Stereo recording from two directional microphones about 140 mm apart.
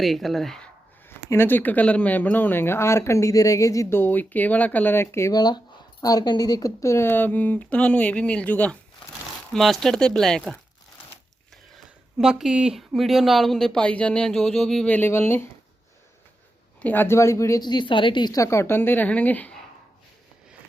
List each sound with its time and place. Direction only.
0.0 s speech: centre (ahead or behind)
1.3 s speech: 15° left (ahead or behind)
12.1 s speech: 5° right (ahead or behind); by 15.4 s 15° left (ahead or behind)
16.8 s a woman's voice: 15° left (ahead or behind)